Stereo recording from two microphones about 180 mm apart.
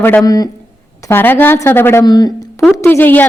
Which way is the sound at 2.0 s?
25° left (ahead or behind).